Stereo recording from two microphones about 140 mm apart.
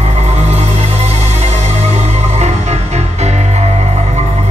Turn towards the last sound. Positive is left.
turn(degrees=-50)  # may be behind; listen again after turning